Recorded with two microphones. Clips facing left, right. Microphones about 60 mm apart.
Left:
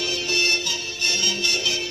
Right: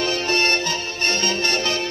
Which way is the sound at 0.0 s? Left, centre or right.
Right.